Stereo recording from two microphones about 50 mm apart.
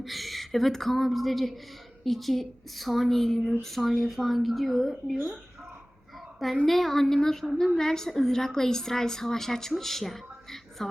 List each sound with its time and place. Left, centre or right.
0.0 s a woman's voice: centre
6.7 s a woman's voice: centre